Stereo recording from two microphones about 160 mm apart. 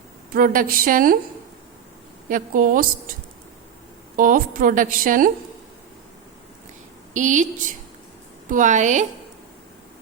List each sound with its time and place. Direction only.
0.3 s a woman's voice: 60° right (ahead or behind)
2.3 s a woman's voice: 60° right (ahead or behind)
4.2 s a woman's voice: 60° right (ahead or behind)
7.1 s a woman's voice: 50° right (ahead or behind)
8.4 s a woman's voice: 55° right (ahead or behind)